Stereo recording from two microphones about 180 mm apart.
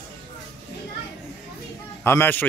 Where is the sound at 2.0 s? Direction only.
15° left (ahead or behind).